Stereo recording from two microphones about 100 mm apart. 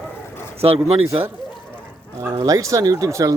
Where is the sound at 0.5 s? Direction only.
80° right.